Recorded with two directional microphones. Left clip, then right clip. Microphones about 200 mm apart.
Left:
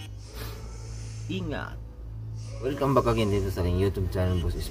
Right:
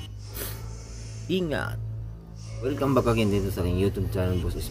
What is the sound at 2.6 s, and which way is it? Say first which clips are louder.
Speech: even; 10° left (ahead or behind).